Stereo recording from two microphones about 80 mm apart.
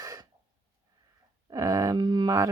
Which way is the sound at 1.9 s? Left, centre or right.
Right.